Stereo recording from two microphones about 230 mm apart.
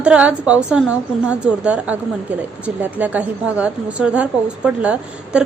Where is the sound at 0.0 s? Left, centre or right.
Centre.